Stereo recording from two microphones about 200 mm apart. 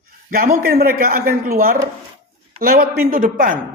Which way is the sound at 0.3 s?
45° right (ahead or behind).